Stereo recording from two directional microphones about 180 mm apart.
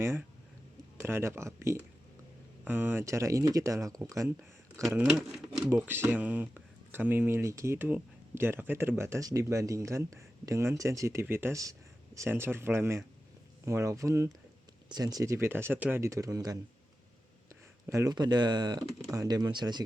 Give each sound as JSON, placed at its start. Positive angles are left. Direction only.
{"t": 0.0, "sound": "speech", "side_deg": -15}